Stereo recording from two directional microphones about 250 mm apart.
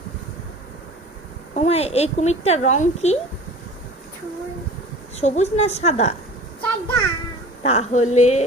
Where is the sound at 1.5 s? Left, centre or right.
Left.